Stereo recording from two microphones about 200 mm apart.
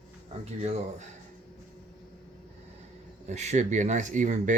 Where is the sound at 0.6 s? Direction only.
35° right (ahead or behind).